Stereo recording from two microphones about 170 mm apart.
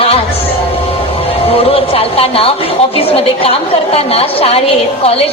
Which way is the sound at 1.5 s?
35° left (ahead or behind).